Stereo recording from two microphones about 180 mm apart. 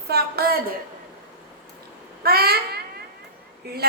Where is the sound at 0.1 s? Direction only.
60° right (ahead or behind).